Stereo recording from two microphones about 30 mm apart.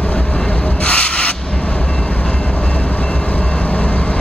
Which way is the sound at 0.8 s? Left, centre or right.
Left.